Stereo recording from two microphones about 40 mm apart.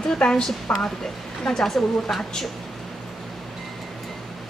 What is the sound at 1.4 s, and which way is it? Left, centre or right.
Speech, centre.